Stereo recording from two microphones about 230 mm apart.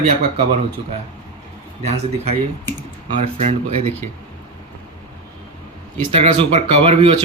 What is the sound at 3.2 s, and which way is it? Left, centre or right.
Speech, right.